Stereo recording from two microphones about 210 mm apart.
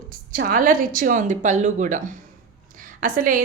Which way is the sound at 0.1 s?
40° right (ahead or behind).